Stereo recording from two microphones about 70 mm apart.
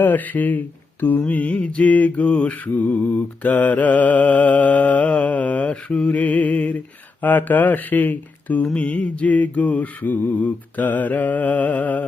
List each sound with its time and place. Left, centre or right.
0.0 s mantra: left